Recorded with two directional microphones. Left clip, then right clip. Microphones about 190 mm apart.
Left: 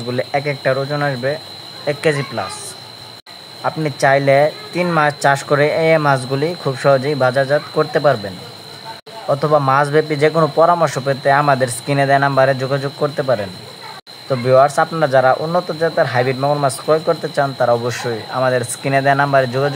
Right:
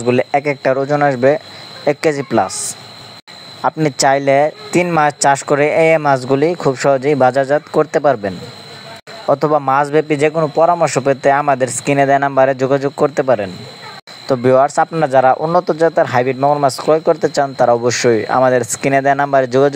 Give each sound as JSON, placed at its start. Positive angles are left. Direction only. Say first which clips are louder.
{"t": 0.0, "sound": "speech", "louder": "right 5 dB", "side_deg": -35}
{"t": 3.6, "sound": "speech", "louder": "right 2 dB", "side_deg": -40}
{"t": 9.3, "sound": "speech", "louder": "right 1 dB", "side_deg": -35}
{"t": 10.4, "sound": "speech", "louder": "even", "side_deg": -15}
{"t": 10.9, "sound": "speech", "louder": "right 3 dB", "side_deg": -30}
{"t": 16.3, "sound": "speech", "louder": "right 4 dB", "side_deg": -25}